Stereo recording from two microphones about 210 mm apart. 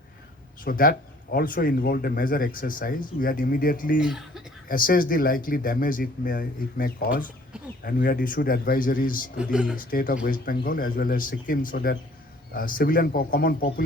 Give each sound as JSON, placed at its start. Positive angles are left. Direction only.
{"t": 0.6, "sound": "speech", "side_deg": 40}
{"t": 4.0, "sound": "speech", "side_deg": 0}
{"t": 4.7, "sound": "speech", "side_deg": 40}
{"t": 9.4, "sound": "speech", "side_deg": -5}
{"t": 9.7, "sound": "speech", "side_deg": 40}